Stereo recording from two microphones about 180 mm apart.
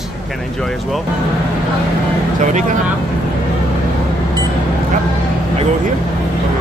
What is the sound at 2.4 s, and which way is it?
Speech, 45° right (ahead or behind).